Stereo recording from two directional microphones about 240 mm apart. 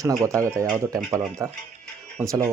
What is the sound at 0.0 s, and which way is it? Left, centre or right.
Speech, centre.